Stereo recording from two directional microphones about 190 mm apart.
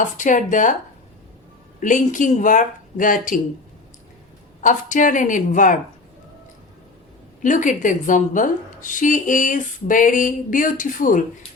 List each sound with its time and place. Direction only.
0.0 s speech: 40° left (ahead or behind)
1.8 s a woman's voice: 40° left (ahead or behind)
4.6 s a woman's voice: 40° left (ahead or behind)
7.4 s a woman's voice: 40° left (ahead or behind)